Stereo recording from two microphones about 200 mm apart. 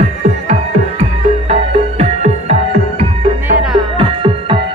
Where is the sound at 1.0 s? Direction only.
30° right (ahead or behind).